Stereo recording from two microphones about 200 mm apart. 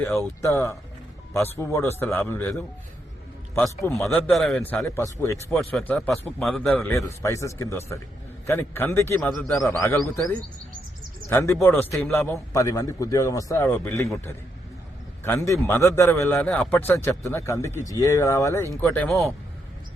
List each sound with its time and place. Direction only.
0.0 s a man's voice: 15° left (ahead or behind)
5.5 s a man's voice: centre (ahead or behind)
15.2 s a man's voice: 15° left (ahead or behind)